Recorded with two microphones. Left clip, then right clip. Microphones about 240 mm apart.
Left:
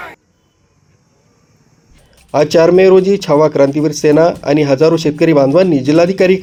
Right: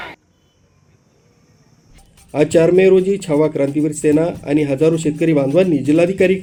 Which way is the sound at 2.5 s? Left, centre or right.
Centre.